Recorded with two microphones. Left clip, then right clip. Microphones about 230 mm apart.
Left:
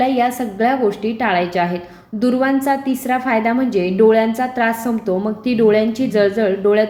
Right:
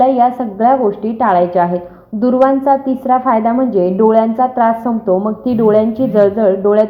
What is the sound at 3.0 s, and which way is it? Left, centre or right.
Speech, centre.